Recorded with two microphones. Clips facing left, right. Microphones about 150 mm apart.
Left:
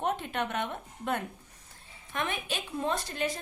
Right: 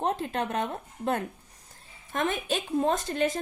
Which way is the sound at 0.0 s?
35° right (ahead or behind).